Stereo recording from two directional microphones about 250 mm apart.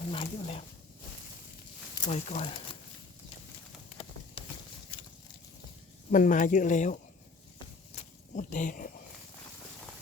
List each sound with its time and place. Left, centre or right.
0.1 s speech: left
2.0 s speech: left
6.1 s speech: left
7.9 s a sound: left